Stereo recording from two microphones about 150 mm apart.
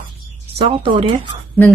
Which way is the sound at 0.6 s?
35° right (ahead or behind).